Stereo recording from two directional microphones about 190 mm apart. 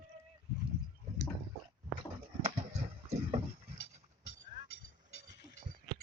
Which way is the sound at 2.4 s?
35° right (ahead or behind).